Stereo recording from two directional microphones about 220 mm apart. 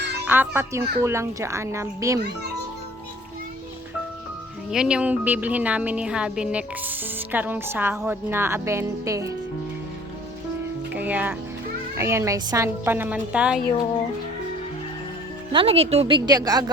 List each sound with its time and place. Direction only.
0.3 s a woman's voice: 10° right (ahead or behind)
4.7 s a woman's voice: 5° right (ahead or behind)
10.9 s a woman's voice: 5° right (ahead or behind)
15.5 s a woman's voice: 25° right (ahead or behind)